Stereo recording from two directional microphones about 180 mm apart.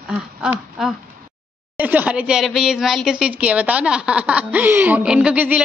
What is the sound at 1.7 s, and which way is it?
A woman's voice, 10° right (ahead or behind).